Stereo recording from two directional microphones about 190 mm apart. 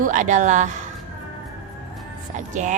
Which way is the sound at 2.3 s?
40° right (ahead or behind).